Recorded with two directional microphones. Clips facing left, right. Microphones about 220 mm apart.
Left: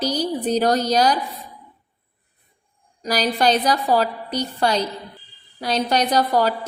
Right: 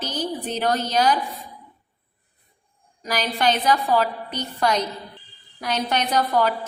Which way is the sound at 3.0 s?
35° left (ahead or behind).